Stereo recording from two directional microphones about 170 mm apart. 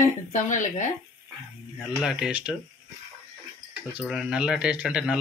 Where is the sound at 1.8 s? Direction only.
Centre (ahead or behind).